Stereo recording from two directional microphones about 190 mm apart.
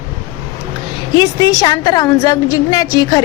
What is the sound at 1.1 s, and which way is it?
A woman's voice, 20° left (ahead or behind).